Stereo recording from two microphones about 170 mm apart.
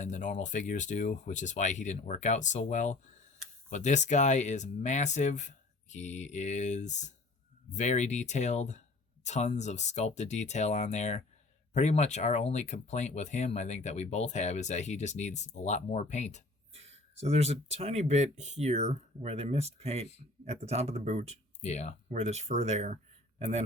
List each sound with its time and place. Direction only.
0.0 s speech: 45° left (ahead or behind)
16.7 s speech: 40° right (ahead or behind)
21.6 s speech: 40° left (ahead or behind)
22.1 s speech: 40° right (ahead or behind)